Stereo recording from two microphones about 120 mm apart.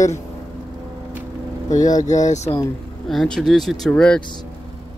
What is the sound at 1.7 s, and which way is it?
Speech, 90° left.